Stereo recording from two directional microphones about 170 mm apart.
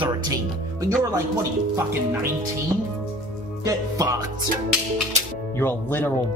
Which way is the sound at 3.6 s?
20° right (ahead or behind).